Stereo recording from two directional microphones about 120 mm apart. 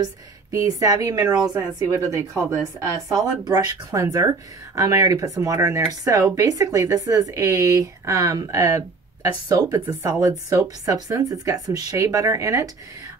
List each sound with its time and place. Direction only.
0.0 s speech: 30° right (ahead or behind)